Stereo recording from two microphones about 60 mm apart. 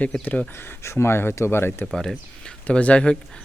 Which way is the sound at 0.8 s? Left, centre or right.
Left.